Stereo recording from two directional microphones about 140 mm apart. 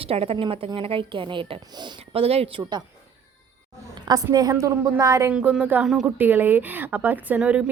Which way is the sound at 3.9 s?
30° right (ahead or behind).